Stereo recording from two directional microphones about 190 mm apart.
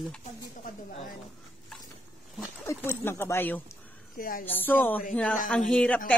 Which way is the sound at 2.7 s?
15° left (ahead or behind).